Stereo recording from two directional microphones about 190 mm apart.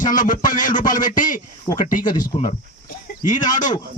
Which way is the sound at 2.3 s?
25° left (ahead or behind).